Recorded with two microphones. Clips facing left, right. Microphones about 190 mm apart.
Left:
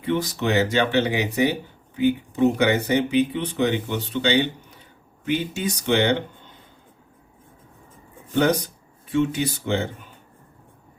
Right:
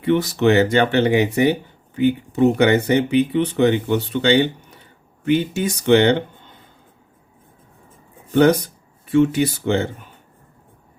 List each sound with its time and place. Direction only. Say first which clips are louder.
0.0 s speech: right 7 dB; 60° right (ahead or behind)
9.1 s speech: right 6 dB; 60° right (ahead or behind)